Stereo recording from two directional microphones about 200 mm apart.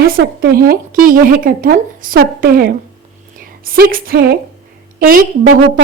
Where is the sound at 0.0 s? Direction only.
50° right (ahead or behind).